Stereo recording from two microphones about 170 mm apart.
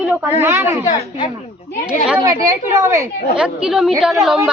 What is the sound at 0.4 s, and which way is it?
Speech, 15° right (ahead or behind).